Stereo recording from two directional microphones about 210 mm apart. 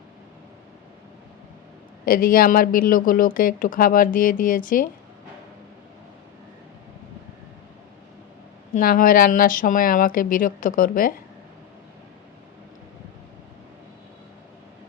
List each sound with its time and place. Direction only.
2.0 s speech: 45° left (ahead or behind)
8.7 s speech: 40° left (ahead or behind)